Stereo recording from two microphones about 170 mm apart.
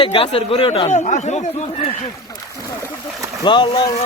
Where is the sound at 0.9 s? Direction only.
45° left (ahead or behind).